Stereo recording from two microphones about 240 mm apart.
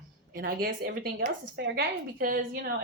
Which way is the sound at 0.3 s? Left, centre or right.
Right.